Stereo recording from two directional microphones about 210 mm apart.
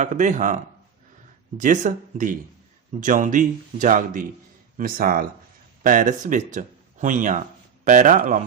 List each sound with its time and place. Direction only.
0.0 s speech: 35° right (ahead or behind)